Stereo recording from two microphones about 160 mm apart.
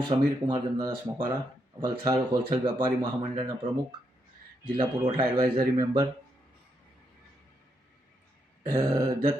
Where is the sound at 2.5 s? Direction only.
30° right (ahead or behind).